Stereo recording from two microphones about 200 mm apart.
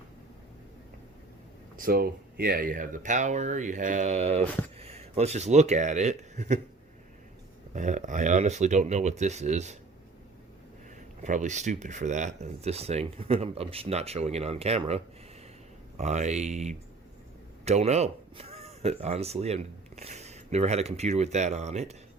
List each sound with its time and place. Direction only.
1.7 s speech: 45° right (ahead or behind)
7.7 s speech: 40° right (ahead or behind)
11.2 s speech: 40° right (ahead or behind)